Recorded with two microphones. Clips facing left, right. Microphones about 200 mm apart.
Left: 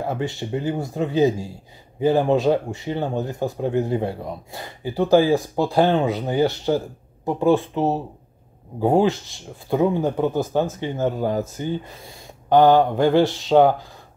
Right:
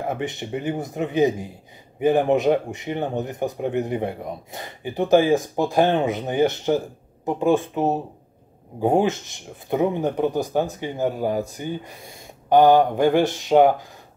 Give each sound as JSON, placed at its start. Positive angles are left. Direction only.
{"t": 0.0, "sound": "speech", "side_deg": -20}